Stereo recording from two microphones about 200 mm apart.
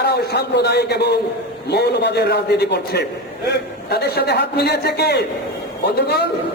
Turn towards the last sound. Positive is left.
turn(degrees=55)  # may be behind; listen again after turning